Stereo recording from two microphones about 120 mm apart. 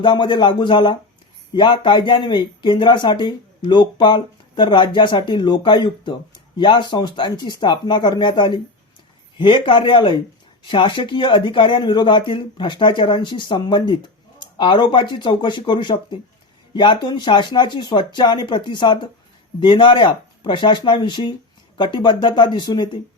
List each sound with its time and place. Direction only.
0.0 s speech: 40° left (ahead or behind)